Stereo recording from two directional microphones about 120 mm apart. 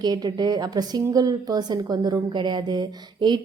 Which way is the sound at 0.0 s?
35° right (ahead or behind).